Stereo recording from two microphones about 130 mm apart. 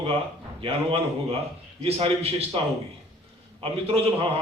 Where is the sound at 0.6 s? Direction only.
45° right (ahead or behind).